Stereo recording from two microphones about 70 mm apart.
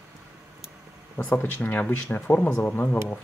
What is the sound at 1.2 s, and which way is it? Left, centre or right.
Speech, left.